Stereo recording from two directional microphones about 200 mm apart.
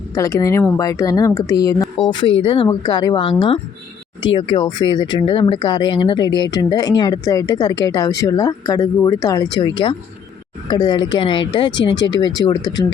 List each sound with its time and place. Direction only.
0.1 s speech: 15° left (ahead or behind)